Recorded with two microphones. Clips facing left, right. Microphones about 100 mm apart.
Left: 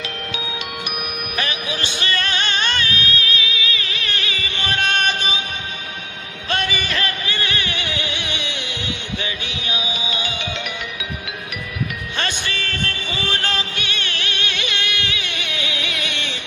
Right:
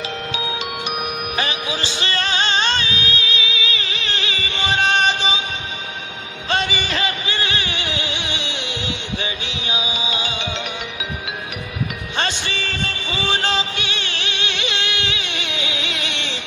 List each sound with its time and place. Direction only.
1.3 s music: 25° right (ahead or behind)
6.5 s music: 25° right (ahead or behind)
12.2 s music: 25° right (ahead or behind)